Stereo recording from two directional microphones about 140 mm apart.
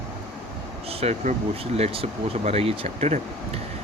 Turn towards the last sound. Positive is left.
turn(degrees=-50)  # may be behind; listen again after turning